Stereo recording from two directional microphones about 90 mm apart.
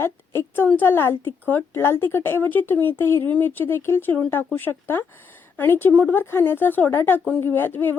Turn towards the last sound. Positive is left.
turn(degrees=20)  # may be behind; listen again after turning